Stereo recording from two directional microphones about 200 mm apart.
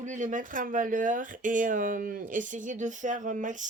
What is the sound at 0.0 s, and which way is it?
Speech, 40° right (ahead or behind).